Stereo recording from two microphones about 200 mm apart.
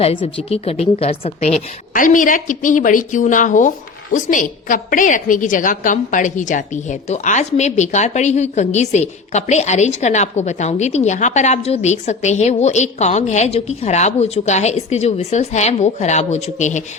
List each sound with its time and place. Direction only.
0.0 s a woman's voice: 25° left (ahead or behind)